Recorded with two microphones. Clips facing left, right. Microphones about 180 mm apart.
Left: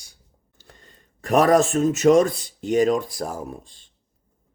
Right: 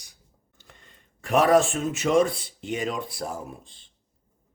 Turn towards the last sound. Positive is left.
turn(degrees=40)  # may be behind; listen again after turning